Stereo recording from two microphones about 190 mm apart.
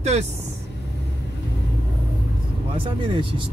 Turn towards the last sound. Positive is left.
turn(degrees=-25)  # may be behind; listen again after turning